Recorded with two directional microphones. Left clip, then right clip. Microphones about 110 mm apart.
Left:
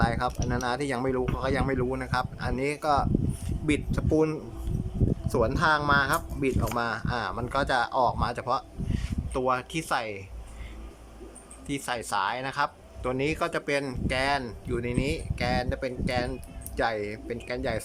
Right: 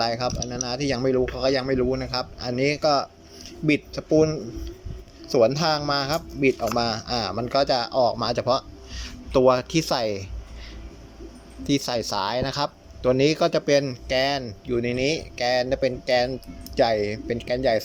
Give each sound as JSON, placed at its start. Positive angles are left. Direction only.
{"t": 0.0, "sound": "a man's voice", "side_deg": -10}
{"t": 5.5, "sound": "a man's voice", "side_deg": -15}
{"t": 8.2, "sound": "speech", "side_deg": -20}
{"t": 11.7, "sound": "speech", "side_deg": -30}